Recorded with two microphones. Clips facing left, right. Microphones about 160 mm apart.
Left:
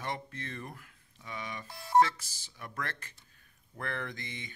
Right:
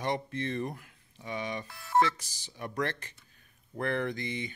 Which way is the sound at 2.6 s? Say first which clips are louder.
Right 7 dB; 20° right (ahead or behind).